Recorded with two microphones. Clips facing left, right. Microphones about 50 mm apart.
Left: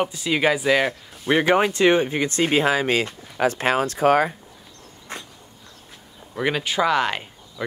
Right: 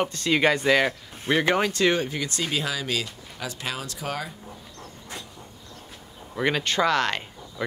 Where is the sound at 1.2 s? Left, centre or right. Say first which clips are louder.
Left 4 dB; centre; by 4.3 s left.